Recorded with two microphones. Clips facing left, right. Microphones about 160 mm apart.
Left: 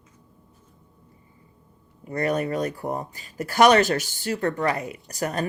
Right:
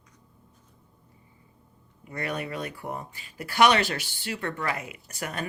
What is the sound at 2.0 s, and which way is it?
Speech, 40° left (ahead or behind).